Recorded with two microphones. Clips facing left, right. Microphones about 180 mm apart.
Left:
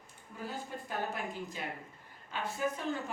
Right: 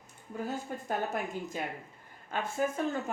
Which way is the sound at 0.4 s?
45° right (ahead or behind).